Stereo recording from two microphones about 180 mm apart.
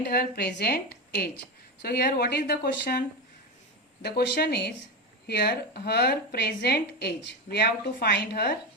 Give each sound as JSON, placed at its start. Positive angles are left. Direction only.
{"t": 0.0, "sound": "a woman's voice", "side_deg": 60}
{"t": 4.0, "sound": "a woman's voice", "side_deg": 60}